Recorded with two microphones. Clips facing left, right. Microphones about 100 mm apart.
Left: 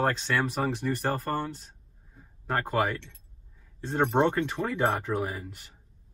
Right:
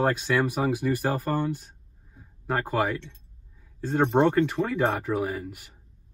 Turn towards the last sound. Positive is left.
turn(degrees=-5)  # may be behind; listen again after turning